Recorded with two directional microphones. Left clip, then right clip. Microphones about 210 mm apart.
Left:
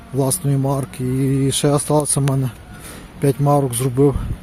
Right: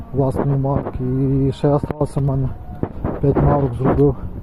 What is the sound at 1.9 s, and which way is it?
Speech, 65° left (ahead or behind).